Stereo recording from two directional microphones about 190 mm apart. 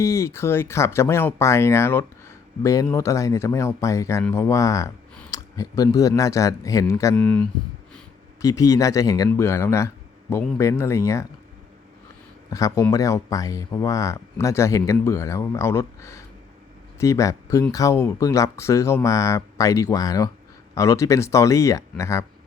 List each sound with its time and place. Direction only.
0.0 s speech: 15° left (ahead or behind)
8.4 s speech: 15° left (ahead or behind)
12.5 s speech: 15° left (ahead or behind)